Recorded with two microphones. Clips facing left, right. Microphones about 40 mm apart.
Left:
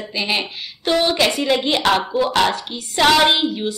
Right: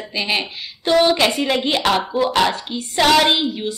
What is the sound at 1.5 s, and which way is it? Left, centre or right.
Speech, centre.